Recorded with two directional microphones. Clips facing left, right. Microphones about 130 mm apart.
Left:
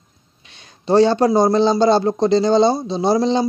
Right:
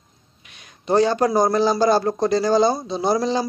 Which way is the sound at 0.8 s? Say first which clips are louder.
Left 4 dB; 30° left (ahead or behind).